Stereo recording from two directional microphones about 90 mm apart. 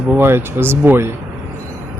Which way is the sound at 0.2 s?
25° right (ahead or behind).